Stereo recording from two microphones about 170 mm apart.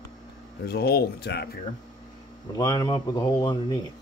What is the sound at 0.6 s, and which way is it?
Speech, 65° left (ahead or behind).